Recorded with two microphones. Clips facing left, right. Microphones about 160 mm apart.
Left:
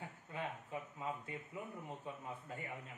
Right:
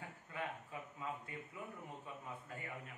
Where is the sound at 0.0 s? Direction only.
25° left (ahead or behind).